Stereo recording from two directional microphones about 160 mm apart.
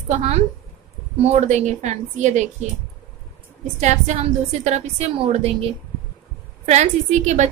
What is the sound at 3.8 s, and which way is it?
A woman's voice, 45° right (ahead or behind).